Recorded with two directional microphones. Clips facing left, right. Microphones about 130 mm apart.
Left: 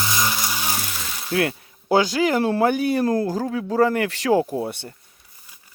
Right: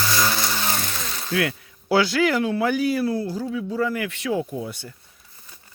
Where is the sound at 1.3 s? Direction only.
40° left (ahead or behind); by 4.4 s 80° left.